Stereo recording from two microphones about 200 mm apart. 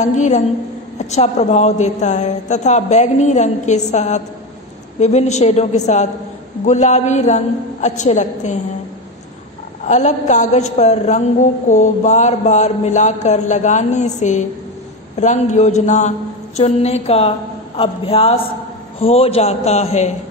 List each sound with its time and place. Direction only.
0.0 s a woman's voice: 35° left (ahead or behind)
9.8 s a woman's voice: 35° left (ahead or behind)